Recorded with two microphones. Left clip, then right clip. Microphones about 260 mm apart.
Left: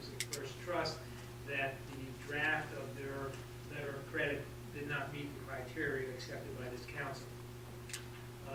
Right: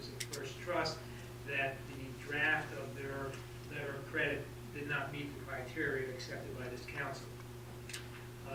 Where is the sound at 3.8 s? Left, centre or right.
Centre.